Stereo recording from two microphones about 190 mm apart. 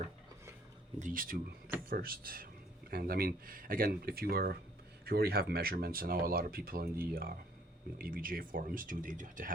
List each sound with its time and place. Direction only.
0.9 s speech: 45° right (ahead or behind)